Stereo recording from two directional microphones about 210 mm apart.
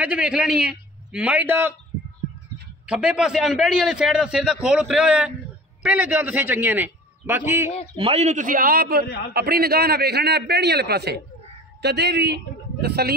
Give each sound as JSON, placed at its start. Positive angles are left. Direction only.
{"t": 0.0, "sound": "a man's voice", "side_deg": -5}
{"t": 2.9, "sound": "a man's voice", "side_deg": -5}
{"t": 8.0, "sound": "a man's voice", "side_deg": -30}